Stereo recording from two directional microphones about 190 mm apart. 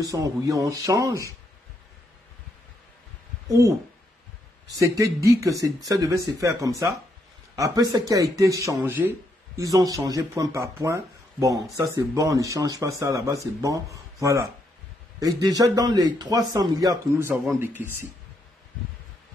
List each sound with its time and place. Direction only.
0.0 s speech: 20° right (ahead or behind)
3.4 s speech: 15° right (ahead or behind)
4.7 s a man's voice: 15° right (ahead or behind)